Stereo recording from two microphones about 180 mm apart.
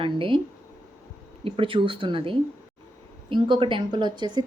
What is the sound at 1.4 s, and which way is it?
Speech, 30° right (ahead or behind).